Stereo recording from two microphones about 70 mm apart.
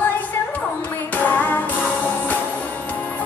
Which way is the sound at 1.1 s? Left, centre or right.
Left.